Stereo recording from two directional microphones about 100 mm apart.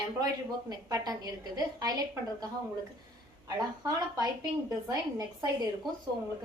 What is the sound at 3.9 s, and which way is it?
Speech, 40° right (ahead or behind).